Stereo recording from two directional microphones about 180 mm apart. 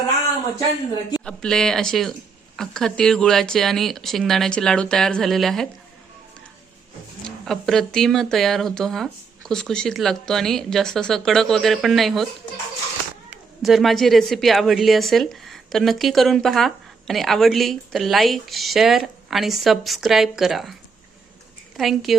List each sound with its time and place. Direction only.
1.2 s speech: 5° left (ahead or behind)
7.3 s speech: centre (ahead or behind)
13.3 s speech: centre (ahead or behind)
21.8 s speech: centre (ahead or behind)